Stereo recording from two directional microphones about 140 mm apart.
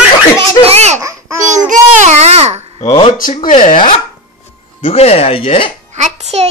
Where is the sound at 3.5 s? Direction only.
65° left (ahead or behind).